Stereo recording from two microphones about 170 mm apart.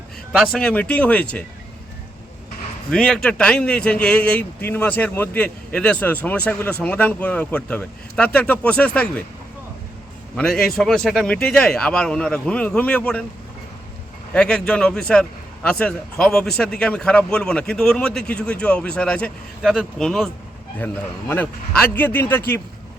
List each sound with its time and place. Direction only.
0.3 s a man's voice: 5° left (ahead or behind)
2.9 s a man's voice: 5° left (ahead or behind)
10.3 s a man's voice: 5° left (ahead or behind)
14.3 s a man's voice: 5° left (ahead or behind)